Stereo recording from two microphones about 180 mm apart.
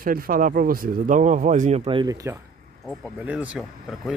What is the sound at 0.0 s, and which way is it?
Speech, 50° right (ahead or behind).